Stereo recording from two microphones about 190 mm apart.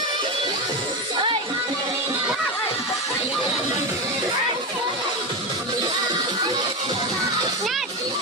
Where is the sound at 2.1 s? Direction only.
10° right (ahead or behind).